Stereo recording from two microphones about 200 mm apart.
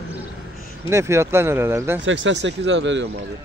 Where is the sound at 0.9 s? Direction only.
15° right (ahead or behind).